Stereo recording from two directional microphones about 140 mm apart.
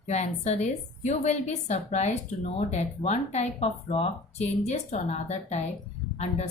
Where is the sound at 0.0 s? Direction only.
55° left (ahead or behind).